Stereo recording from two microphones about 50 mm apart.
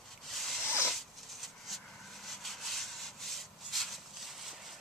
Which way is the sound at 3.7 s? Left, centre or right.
Centre.